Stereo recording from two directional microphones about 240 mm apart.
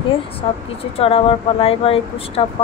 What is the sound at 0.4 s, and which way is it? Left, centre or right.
Speech, left.